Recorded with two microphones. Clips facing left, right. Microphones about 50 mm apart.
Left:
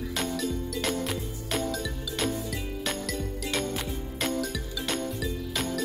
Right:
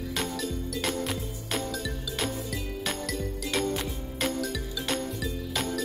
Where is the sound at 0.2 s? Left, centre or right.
Centre.